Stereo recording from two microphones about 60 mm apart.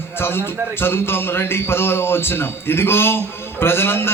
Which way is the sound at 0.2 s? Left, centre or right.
Left.